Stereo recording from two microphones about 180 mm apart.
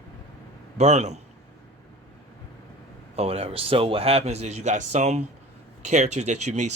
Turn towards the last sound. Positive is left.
turn(degrees=-40)  # may be behind; listen again after turning